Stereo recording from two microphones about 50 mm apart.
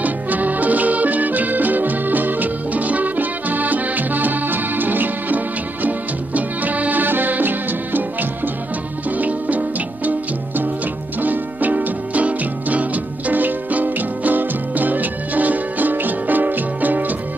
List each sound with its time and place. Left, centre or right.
0.0 s music: right